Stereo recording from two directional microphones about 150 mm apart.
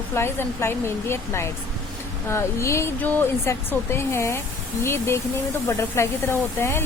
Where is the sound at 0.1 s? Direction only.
15° left (ahead or behind).